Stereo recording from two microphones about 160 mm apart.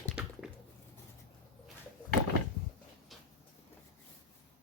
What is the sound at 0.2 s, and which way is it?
Squish, 5° right (ahead or behind).